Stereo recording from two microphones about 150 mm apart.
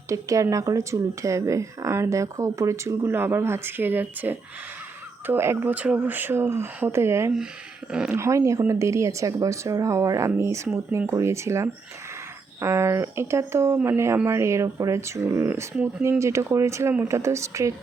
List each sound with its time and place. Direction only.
0.1 s speech: 20° right (ahead or behind)